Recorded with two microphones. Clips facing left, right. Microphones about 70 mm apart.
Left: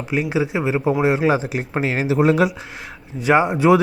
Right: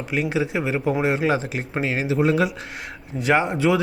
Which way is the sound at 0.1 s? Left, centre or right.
Centre.